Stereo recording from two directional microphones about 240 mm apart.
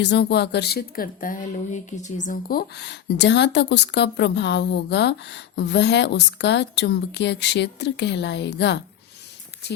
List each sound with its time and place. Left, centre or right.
0.0 s a woman's voice: left